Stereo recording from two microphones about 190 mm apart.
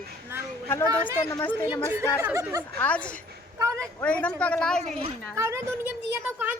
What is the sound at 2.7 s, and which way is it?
Speech, 5° left (ahead or behind).